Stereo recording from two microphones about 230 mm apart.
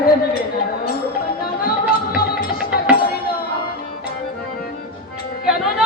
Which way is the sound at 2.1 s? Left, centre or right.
Left.